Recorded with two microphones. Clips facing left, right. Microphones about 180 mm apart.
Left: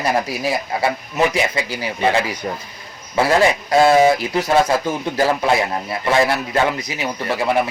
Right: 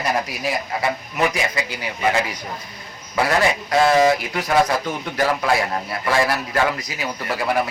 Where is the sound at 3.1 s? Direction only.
25° left (ahead or behind).